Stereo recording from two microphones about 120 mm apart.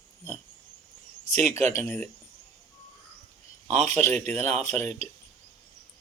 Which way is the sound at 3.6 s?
65° right (ahead or behind).